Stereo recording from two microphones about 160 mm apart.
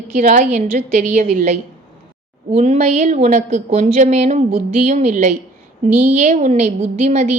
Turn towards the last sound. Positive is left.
turn(degrees=-45)  # may be behind; listen again after turning